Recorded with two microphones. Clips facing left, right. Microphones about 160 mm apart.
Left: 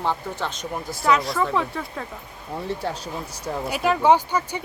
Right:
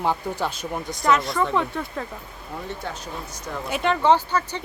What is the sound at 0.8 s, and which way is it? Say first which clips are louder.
Speech: even; centre (ahead or behind).